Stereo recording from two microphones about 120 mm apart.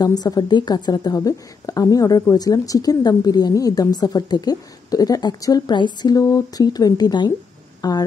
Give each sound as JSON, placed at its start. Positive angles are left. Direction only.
{"t": 0.2, "sound": "a woman's voice", "side_deg": 35}